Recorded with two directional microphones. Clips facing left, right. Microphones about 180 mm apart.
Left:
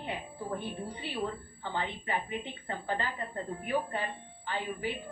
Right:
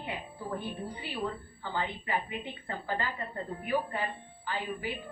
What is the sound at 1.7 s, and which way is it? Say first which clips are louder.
A woman's voice: right 1 dB; 25° left (ahead or behind).